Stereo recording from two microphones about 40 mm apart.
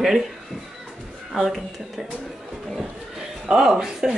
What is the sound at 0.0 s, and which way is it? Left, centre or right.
Speech, centre.